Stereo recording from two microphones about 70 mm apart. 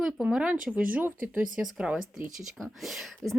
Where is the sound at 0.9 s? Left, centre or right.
Right.